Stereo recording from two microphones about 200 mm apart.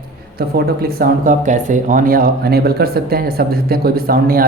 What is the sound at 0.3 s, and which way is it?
Speech, 50° right (ahead or behind).